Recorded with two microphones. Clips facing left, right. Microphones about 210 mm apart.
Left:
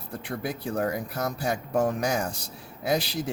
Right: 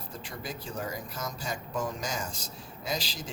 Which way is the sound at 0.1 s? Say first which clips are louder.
Left 9 dB; 60° left (ahead or behind).